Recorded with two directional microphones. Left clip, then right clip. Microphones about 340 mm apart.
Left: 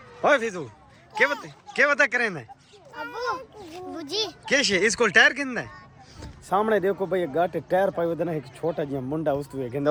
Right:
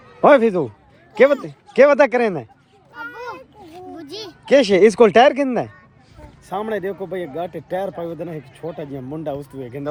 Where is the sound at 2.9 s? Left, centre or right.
Left.